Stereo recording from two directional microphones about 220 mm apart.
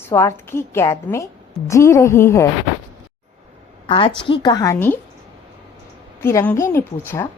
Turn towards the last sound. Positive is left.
turn(degrees=10)  # may be behind; listen again after turning